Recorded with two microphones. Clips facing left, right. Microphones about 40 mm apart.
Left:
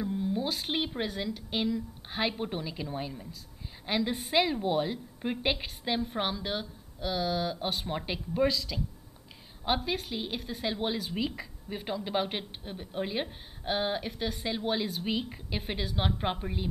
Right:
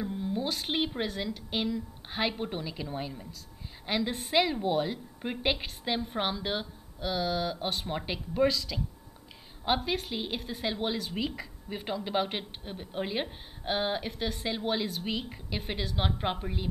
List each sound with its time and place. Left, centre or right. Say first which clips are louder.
0.0 s a woman's voice: left 1 dB; centre